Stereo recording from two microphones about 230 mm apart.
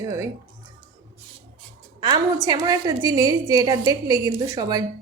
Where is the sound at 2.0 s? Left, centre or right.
Centre.